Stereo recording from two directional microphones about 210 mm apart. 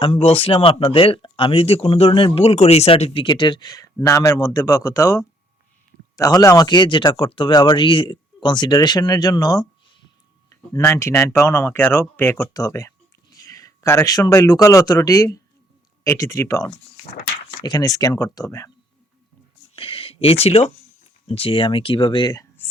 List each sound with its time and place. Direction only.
0.0 s speech: 30° left (ahead or behind)
19.7 s a sound: 25° left (ahead or behind)
21.2 s speech: 25° left (ahead or behind)